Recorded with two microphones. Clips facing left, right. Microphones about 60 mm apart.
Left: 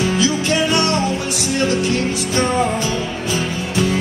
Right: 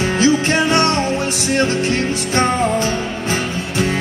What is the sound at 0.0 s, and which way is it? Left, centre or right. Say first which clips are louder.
Music: right 3 dB; right.